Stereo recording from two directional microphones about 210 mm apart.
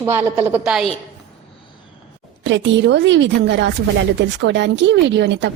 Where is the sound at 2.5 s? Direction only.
60° right (ahead or behind).